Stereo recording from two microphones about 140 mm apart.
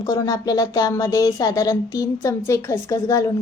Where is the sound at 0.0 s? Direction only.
25° left (ahead or behind).